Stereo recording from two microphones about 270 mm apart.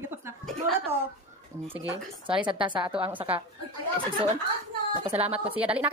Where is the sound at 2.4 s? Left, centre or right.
Centre.